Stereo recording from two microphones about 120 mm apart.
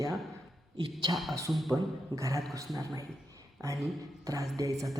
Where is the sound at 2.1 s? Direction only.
25° right (ahead or behind).